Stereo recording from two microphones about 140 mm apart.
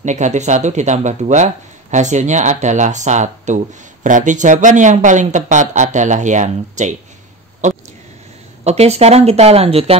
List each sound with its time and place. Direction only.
0.0 s speech: 60° right (ahead or behind)
7.6 s a sound: 60° right (ahead or behind)
8.6 s speech: 50° right (ahead or behind)